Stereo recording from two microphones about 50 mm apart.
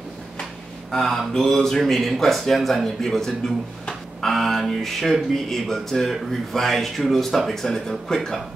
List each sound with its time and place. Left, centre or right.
0.9 s speech: centre